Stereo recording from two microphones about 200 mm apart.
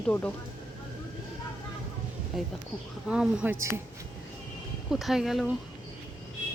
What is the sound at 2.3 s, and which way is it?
Speech, centre (ahead or behind).